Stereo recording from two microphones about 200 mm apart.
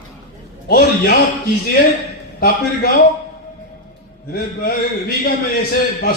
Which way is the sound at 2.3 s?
50° left (ahead or behind).